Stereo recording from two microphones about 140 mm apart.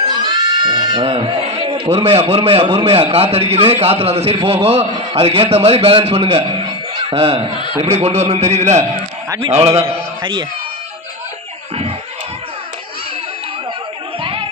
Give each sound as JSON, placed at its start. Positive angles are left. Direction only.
{"t": 0.1, "sound": "goat", "side_deg": -30}
{"t": 1.9, "sound": "a man's voice", "side_deg": -50}
{"t": 14.2, "sound": "a sound", "side_deg": -40}